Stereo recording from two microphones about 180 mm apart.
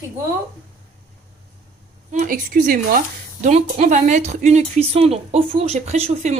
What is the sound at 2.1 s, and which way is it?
Speech, 50° right (ahead or behind).